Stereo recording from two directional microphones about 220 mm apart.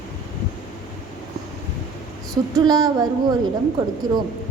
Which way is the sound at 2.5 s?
15° right (ahead or behind).